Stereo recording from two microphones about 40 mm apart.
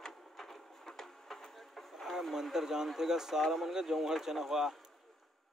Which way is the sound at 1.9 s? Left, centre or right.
Centre.